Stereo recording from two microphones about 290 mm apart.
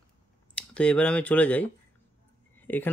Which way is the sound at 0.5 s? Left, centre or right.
Centre.